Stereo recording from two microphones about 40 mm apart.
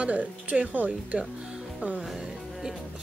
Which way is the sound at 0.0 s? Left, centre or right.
Right.